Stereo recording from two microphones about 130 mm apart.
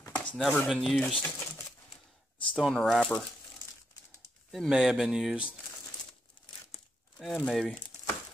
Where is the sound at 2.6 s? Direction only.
Centre (ahead or behind).